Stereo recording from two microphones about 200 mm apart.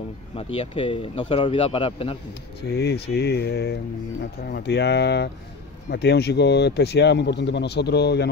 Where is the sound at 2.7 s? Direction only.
55° left (ahead or behind).